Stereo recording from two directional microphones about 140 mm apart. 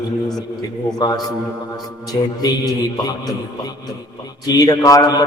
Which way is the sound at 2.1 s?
30° left (ahead or behind).